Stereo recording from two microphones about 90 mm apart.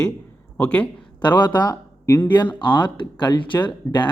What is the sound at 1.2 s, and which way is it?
Speech, 55° left (ahead or behind).